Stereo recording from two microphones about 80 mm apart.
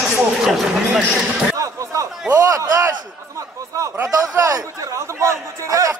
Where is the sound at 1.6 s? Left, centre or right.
Right.